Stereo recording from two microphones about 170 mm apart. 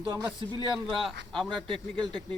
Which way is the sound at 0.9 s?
Centre (ahead or behind).